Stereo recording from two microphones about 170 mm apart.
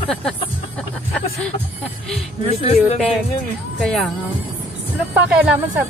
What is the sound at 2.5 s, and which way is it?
Speech, 35° left (ahead or behind).